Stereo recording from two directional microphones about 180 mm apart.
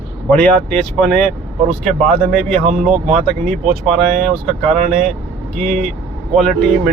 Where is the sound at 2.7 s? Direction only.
40° right (ahead or behind).